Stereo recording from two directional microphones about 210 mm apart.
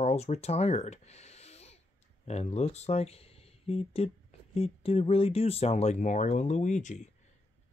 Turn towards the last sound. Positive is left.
turn(degrees=35)  # may be behind; listen again after turning